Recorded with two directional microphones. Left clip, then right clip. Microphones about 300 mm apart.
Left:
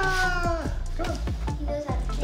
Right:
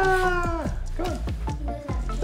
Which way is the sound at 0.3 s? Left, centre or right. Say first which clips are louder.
Right 1 dB; right.